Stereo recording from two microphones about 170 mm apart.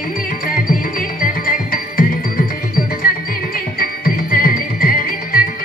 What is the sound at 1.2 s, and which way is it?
Music, 55° left (ahead or behind).